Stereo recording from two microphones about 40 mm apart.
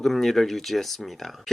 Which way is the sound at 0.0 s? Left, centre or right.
Centre.